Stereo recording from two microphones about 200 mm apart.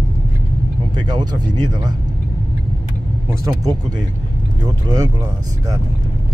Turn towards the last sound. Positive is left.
turn(degrees=-20)  # may be behind; listen again after turning